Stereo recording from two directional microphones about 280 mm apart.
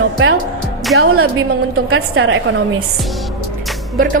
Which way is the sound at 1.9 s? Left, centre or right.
Right.